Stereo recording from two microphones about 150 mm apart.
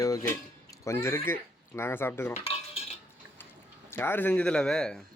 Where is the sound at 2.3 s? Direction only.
45° left (ahead or behind).